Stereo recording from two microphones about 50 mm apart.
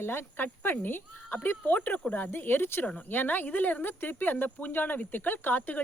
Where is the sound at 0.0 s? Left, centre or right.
Left.